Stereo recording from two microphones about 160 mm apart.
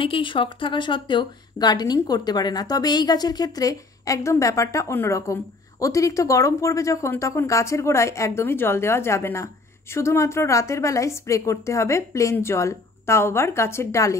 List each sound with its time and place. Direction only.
0.0 s a woman's voice: 30° left (ahead or behind)